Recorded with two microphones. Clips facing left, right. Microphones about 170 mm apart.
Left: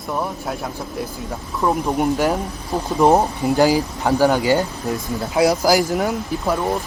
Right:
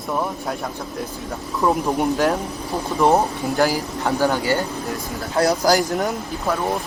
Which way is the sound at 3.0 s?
15° left (ahead or behind).